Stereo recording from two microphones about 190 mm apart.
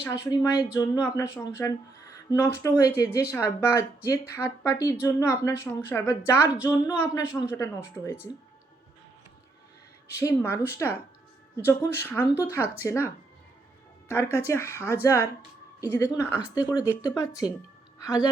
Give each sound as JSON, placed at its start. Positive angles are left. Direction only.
{"t": 0.0, "sound": "speech", "side_deg": 20}
{"t": 10.2, "sound": "speech", "side_deg": 15}
{"t": 14.1, "sound": "speech", "side_deg": 15}